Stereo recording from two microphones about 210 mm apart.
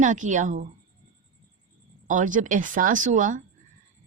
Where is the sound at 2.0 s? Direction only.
35° right (ahead or behind).